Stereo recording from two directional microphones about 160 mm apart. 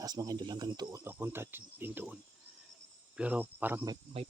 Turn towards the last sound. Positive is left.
turn(degrees=-35)  # may be behind; listen again after turning